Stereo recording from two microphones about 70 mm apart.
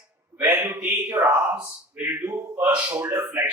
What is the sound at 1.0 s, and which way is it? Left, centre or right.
A man's voice, right.